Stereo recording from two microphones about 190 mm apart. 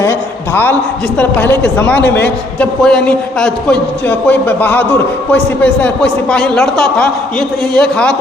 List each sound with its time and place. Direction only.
0.0 s a man's voice: 10° left (ahead or behind)